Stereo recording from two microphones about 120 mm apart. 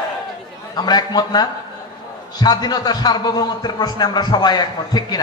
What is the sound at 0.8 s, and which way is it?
A man's voice, 35° left (ahead or behind).